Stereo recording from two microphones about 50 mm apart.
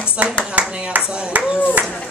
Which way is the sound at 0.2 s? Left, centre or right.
Right.